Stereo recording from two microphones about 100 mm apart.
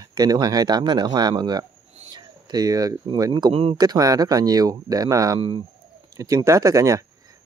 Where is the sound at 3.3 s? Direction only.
45° right (ahead or behind).